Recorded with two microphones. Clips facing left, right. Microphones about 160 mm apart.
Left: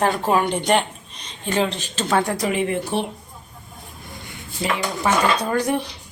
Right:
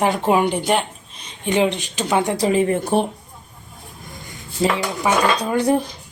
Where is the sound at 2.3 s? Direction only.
30° right (ahead or behind).